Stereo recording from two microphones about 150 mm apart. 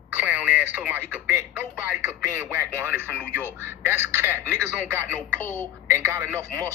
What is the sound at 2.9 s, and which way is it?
Speech, 15° right (ahead or behind).